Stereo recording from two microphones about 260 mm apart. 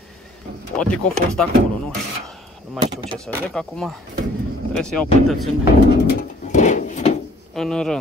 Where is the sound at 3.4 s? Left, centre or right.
Centre.